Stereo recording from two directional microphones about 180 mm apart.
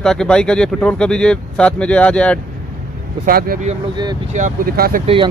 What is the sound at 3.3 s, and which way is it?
Speech, 55° right (ahead or behind).